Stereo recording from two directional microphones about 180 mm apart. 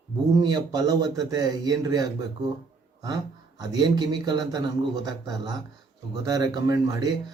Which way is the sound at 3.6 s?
25° right (ahead or behind).